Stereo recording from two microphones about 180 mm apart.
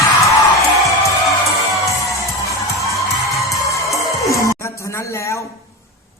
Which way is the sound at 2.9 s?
15° left (ahead or behind).